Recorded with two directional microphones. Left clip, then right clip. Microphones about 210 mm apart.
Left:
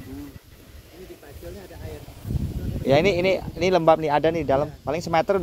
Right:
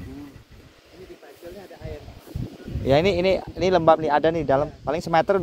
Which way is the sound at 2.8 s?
Centre (ahead or behind).